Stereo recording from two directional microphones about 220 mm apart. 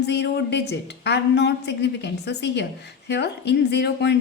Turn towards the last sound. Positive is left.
turn(degrees=50)  # may be behind; listen again after turning